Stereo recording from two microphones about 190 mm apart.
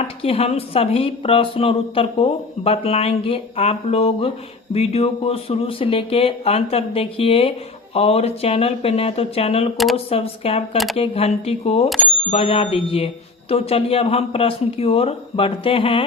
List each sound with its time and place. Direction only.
0.2 s a woman's voice: 30° left (ahead or behind)